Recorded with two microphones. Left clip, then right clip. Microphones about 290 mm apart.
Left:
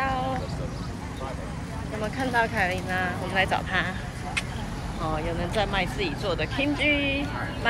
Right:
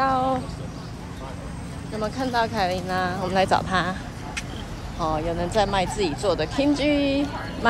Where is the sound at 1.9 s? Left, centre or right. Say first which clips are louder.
Right 1 dB; centre.